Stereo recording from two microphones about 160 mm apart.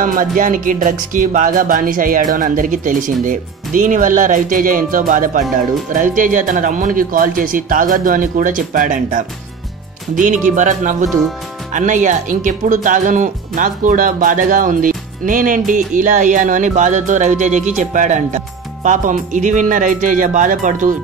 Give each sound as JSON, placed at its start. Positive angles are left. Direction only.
{"t": 0.0, "sound": "music", "side_deg": -60}
{"t": 10.1, "sound": "speech", "side_deg": -55}